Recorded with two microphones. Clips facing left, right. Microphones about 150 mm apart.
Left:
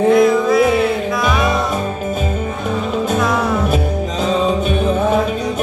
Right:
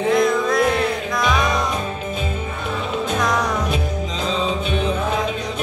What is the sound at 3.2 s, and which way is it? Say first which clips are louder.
Music: left 2 dB; 5° left (ahead or behind).